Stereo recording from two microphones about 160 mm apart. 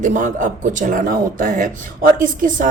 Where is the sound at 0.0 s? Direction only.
55° right (ahead or behind).